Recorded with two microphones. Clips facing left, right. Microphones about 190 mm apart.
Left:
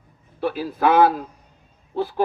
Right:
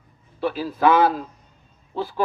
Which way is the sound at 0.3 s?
55° left (ahead or behind).